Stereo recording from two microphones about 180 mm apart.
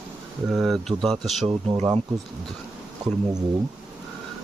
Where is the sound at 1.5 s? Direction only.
30° right (ahead or behind).